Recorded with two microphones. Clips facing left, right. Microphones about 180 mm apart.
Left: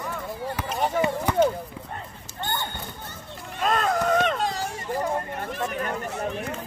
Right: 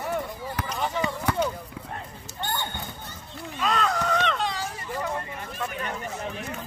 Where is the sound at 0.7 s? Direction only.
50° left (ahead or behind).